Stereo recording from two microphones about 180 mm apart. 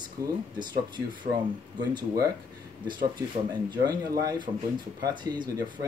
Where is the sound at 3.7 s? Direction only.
25° right (ahead or behind).